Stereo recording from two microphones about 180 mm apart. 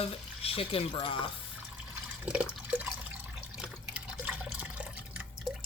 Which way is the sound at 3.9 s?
5° right (ahead or behind).